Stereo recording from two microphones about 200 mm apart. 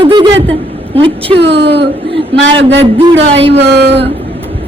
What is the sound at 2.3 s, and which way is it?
Speech, 65° right (ahead or behind).